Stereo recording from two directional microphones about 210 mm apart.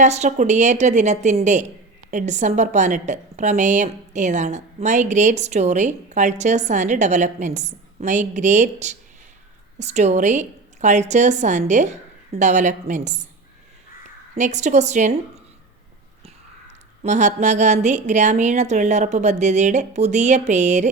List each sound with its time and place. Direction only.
0.0 s a woman's voice: 35° right (ahead or behind)
14.3 s a woman's voice: 35° right (ahead or behind)
17.0 s a woman's voice: 35° right (ahead or behind)